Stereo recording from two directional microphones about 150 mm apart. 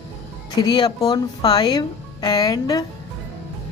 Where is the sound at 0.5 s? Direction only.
30° left (ahead or behind).